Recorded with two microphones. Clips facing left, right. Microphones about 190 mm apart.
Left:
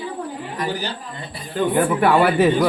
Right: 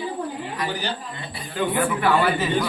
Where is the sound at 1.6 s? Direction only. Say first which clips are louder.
Left 4 dB; 50° left (ahead or behind).